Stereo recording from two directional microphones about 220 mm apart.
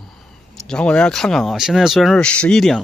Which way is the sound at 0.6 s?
5° left (ahead or behind).